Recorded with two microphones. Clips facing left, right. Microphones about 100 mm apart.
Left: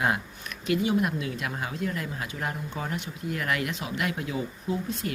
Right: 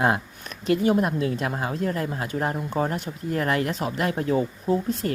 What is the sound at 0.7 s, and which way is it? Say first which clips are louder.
Speech: right 4 dB; 45° right (ahead or behind).